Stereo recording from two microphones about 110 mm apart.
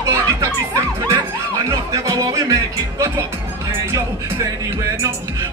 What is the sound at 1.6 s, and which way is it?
Music, 30° right (ahead or behind).